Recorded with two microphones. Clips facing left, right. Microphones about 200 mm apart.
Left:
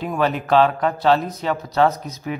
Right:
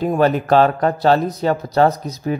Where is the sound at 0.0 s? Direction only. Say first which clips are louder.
Right 5 dB; 40° right (ahead or behind).